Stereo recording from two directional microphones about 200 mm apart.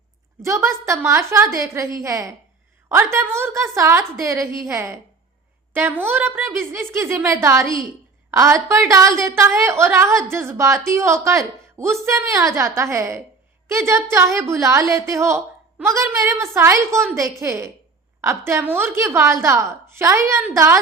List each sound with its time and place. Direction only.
0.4 s a woman's voice: 15° right (ahead or behind)